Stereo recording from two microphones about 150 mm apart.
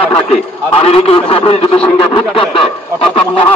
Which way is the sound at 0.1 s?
40° left (ahead or behind).